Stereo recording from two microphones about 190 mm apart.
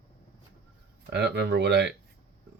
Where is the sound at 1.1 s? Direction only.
60° right (ahead or behind).